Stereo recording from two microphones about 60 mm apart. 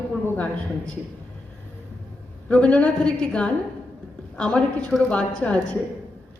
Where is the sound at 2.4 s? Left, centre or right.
Centre.